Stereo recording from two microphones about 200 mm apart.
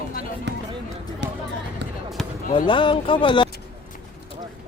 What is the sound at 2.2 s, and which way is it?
Basketball bounce, centre (ahead or behind).